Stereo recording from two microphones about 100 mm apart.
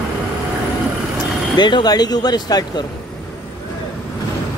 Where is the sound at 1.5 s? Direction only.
45° left (ahead or behind).